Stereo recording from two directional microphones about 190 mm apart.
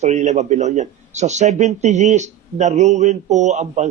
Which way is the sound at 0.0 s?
40° right (ahead or behind).